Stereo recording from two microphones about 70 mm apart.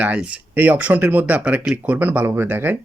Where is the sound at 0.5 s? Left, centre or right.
Right.